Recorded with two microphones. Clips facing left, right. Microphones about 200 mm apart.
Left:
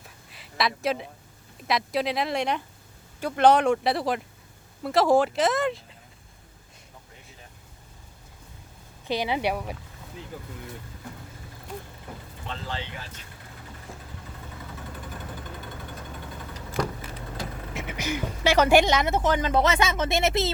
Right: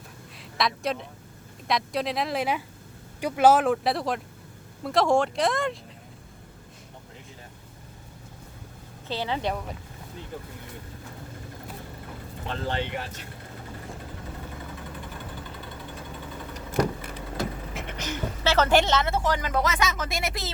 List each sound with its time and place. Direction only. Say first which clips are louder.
0.3 s a woman's voice: even; centre (ahead or behind)
9.0 s speech: left 3 dB; 15° left (ahead or behind)
12.5 s speech: right 6 dB; 60° right (ahead or behind)
17.7 s speech: left 4 dB; 5° left (ahead or behind); by 20.5 s 25° left (ahead or behind)